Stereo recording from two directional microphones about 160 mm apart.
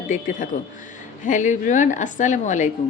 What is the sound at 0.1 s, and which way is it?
Speech, 55° left (ahead or behind).